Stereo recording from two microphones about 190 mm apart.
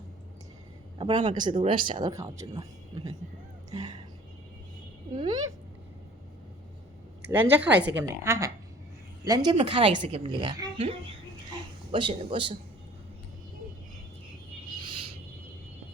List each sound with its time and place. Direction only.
0.9 s speech: 25° right (ahead or behind)
5.1 s speech: 20° right (ahead or behind)
7.2 s speech: 10° right (ahead or behind)
11.9 s speech: 25° right (ahead or behind)
14.7 s owl: 25° right (ahead or behind)